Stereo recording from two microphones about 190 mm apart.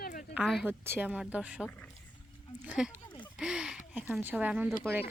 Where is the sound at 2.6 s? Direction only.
5° right (ahead or behind).